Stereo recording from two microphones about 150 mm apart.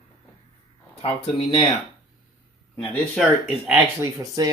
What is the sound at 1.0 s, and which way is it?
Speech, 35° left (ahead or behind).